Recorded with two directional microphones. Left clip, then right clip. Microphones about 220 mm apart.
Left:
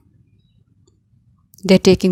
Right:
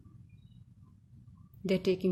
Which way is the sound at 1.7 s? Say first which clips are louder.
Left 17 dB; 40° left (ahead or behind).